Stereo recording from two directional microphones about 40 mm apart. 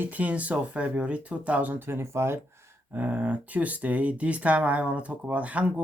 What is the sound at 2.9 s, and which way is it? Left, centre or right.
Speech, right.